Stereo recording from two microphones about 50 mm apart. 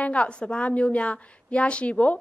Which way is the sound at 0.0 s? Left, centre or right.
Left.